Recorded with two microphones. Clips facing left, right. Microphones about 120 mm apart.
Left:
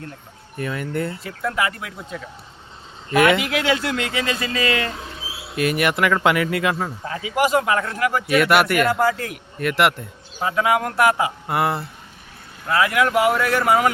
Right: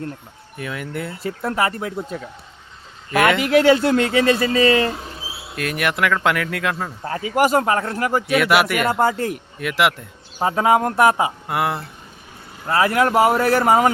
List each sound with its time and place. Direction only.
0.5 s speech: centre (ahead or behind)
1.2 s speech: 35° right (ahead or behind)
3.1 s speech: centre (ahead or behind)
3.5 s speech: 40° right (ahead or behind)
5.5 s speech: 5° left (ahead or behind)
7.0 s speech: 45° right (ahead or behind)
8.3 s speech: centre (ahead or behind)
8.9 s speech: 25° right (ahead or behind)
9.6 s speech: centre (ahead or behind)
10.4 s speech: 35° right (ahead or behind)
11.4 s speech: centre (ahead or behind)
12.6 s speech: 35° right (ahead or behind)